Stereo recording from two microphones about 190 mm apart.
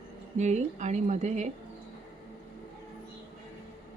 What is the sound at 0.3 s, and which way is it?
Speech, 40° right (ahead or behind).